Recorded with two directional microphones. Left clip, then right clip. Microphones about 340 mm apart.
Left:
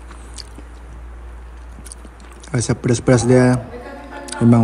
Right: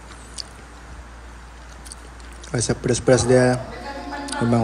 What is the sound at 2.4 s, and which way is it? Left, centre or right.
Speech, centre.